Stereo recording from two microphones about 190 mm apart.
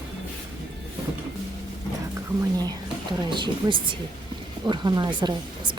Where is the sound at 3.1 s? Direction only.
25° right (ahead or behind).